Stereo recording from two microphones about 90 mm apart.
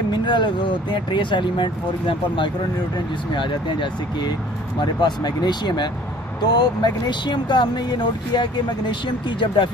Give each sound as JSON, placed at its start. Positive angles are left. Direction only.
{"t": 0.1, "sound": "speech", "side_deg": 60}